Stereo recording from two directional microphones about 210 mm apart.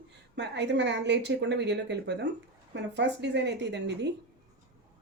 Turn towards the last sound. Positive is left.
turn(degrees=-55)  # may be behind; listen again after turning